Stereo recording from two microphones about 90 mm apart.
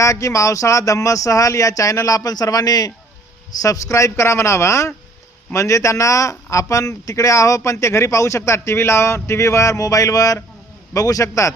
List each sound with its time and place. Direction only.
0.0 s a man's voice: 35° left (ahead or behind)